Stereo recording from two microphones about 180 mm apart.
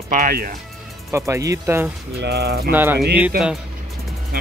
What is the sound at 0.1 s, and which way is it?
Speech, 55° right (ahead or behind).